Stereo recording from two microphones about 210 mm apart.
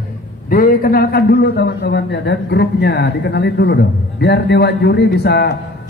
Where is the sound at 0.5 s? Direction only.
45° left (ahead or behind).